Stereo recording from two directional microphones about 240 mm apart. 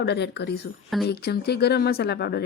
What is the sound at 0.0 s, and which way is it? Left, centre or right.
A woman's voice, left.